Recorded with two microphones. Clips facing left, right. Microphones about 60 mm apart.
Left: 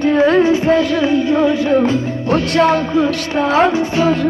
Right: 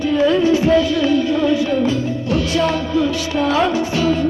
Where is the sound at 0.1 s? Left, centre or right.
Left.